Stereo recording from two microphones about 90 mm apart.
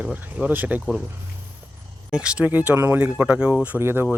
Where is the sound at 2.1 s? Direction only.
10° right (ahead or behind).